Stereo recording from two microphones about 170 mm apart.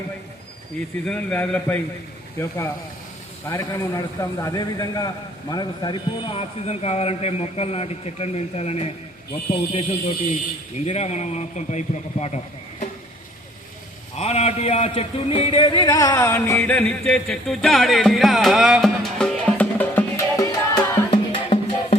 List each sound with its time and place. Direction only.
1.0 s a man's voice: 10° left (ahead or behind); by 8.9 s 35° left (ahead or behind)
10.8 s a man's voice: 40° left (ahead or behind)
14.2 s speech: 40° left (ahead or behind)